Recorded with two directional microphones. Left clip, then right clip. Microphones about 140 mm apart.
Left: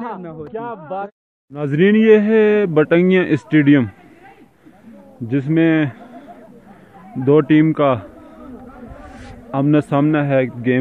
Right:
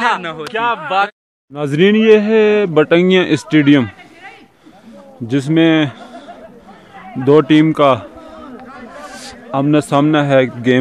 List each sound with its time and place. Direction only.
0.5 s speech: 25° right (ahead or behind)
2.0 s a man's voice: 10° right (ahead or behind)
5.3 s a man's voice: 30° right (ahead or behind)
7.2 s a man's voice: 25° right (ahead or behind)
9.1 s a sound: 15° right (ahead or behind)
10.0 s a man's voice: 35° right (ahead or behind)